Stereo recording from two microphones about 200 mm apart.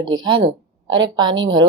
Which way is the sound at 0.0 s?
20° right (ahead or behind).